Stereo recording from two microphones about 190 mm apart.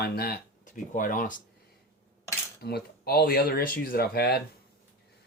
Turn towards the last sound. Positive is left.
turn(degrees=55)  # may be behind; listen again after turning